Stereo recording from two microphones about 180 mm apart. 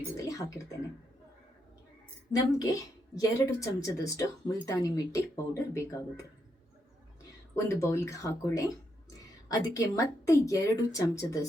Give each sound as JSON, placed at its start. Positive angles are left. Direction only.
{"t": 0.2, "sound": "speech", "side_deg": 20}
{"t": 2.3, "sound": "speech", "side_deg": 20}
{"t": 7.5, "sound": "speech", "side_deg": 15}